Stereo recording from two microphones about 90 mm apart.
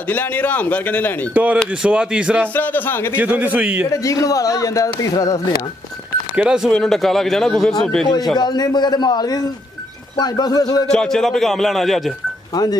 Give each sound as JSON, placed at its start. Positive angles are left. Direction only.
{"t": 0.1, "sound": "a man's voice", "side_deg": 20}
{"t": 1.3, "sound": "a man's voice", "side_deg": -15}
{"t": 2.4, "sound": "a man's voice", "side_deg": 20}
{"t": 3.2, "sound": "a man's voice", "side_deg": -15}
{"t": 3.9, "sound": "speech", "side_deg": 40}
{"t": 6.3, "sound": "a man's voice", "side_deg": -10}
{"t": 6.7, "sound": "a man's voice", "side_deg": 5}
{"t": 8.4, "sound": "a man's voice", "side_deg": 55}
{"t": 10.9, "sound": "a man's voice", "side_deg": 5}